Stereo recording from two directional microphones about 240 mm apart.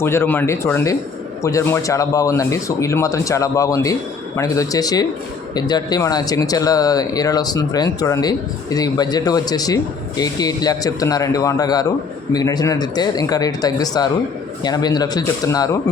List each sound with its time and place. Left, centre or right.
0.0 s speech: centre